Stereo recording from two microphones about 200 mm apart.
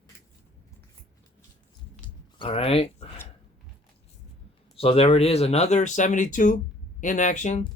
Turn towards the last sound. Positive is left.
turn(degrees=35)  # may be behind; listen again after turning